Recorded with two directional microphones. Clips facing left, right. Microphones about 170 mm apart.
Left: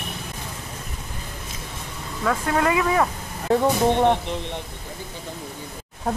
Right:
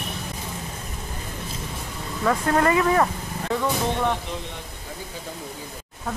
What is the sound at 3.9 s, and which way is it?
Speech, 20° left (ahead or behind).